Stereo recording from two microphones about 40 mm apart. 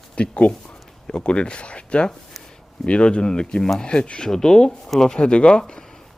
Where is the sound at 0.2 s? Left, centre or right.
Left.